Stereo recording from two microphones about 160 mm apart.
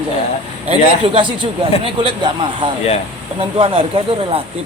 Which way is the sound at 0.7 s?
35° right (ahead or behind).